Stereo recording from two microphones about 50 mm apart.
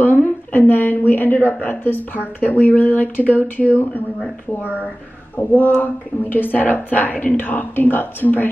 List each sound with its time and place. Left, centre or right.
0.0 s a woman's voice: left
5.4 s a woman's voice: left